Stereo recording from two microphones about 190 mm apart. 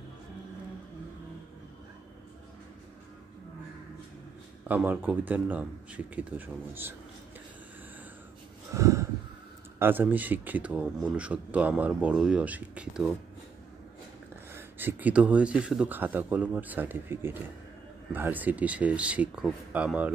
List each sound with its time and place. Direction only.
4.6 s speech: 10° right (ahead or behind)
8.7 s snort: 15° right (ahead or behind)
9.8 s speech: 10° right (ahead or behind)
14.5 s speech: 10° right (ahead or behind)